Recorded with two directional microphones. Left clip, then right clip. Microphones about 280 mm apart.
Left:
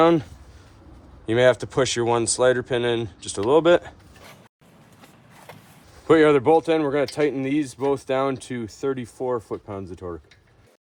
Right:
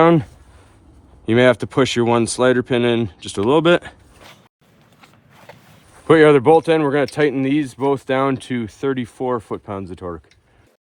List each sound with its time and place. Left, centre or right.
0.0 s speech: right
1.3 s speech: right
6.1 s speech: right